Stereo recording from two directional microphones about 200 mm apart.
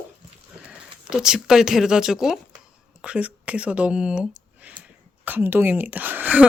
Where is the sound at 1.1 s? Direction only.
5° right (ahead or behind).